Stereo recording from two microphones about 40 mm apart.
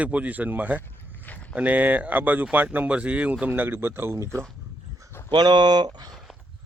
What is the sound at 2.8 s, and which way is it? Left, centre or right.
Speech, right.